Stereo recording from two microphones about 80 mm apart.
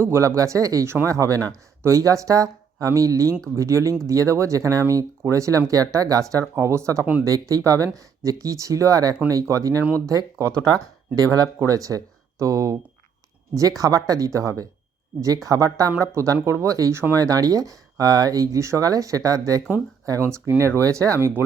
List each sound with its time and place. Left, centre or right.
0.0 s speech: right
7.0 s speech: centre
7.3 s speech: right
20.1 s speech: right